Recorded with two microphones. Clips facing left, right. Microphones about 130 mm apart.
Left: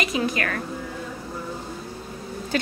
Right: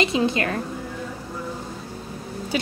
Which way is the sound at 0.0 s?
25° right (ahead or behind).